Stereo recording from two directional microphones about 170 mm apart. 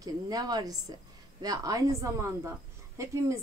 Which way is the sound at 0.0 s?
20° right (ahead or behind).